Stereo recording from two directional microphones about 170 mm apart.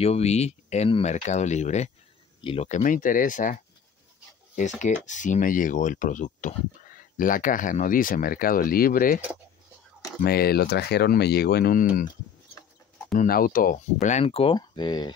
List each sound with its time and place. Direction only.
0.0 s speech: 40° left (ahead or behind); by 9.2 s 55° left (ahead or behind)
10.2 s speech: 65° left (ahead or behind)
13.1 s speech: 55° left (ahead or behind)
14.2 s speech: 35° left (ahead or behind)